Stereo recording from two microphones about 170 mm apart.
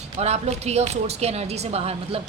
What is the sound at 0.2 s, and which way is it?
A woman's voice, 40° right (ahead or behind).